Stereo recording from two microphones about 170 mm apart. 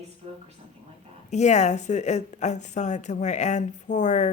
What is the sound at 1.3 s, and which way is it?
A woman's voice, 45° left (ahead or behind).